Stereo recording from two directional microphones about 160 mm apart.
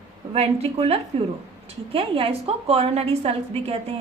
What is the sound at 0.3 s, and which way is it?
Speech, 40° right (ahead or behind).